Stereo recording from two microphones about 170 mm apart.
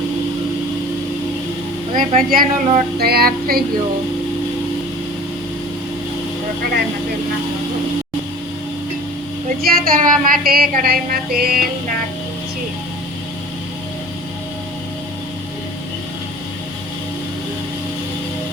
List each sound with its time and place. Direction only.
2.1 s speech: 55° right (ahead or behind)
9.6 s speech: 60° right (ahead or behind)